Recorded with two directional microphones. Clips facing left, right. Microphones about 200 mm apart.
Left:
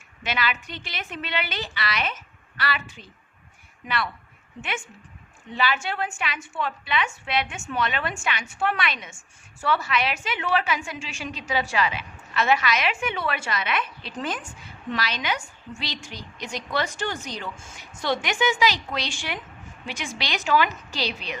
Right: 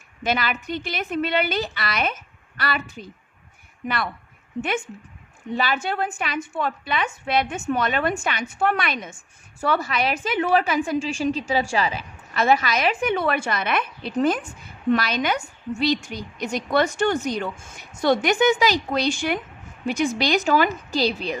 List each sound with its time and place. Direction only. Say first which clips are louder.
0.3 s a woman's voice: right 4 dB; 45° right (ahead or behind)
5.5 s a woman's voice: right 2 dB; 45° right (ahead or behind)